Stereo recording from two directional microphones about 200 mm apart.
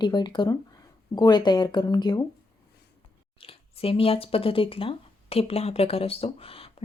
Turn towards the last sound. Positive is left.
turn(degrees=30)  # may be behind; listen again after turning